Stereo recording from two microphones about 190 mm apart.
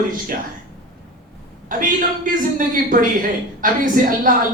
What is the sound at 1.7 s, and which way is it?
Speech, 45° right (ahead or behind).